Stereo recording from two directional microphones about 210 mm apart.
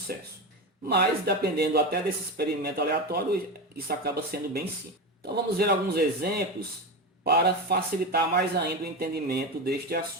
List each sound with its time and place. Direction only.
0.9 s speech: 50° right (ahead or behind)